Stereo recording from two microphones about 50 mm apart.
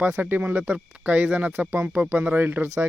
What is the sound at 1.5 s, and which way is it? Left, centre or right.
Speech, right.